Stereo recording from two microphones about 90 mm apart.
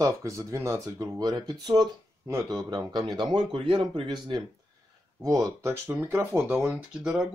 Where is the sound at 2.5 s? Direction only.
50° right (ahead or behind).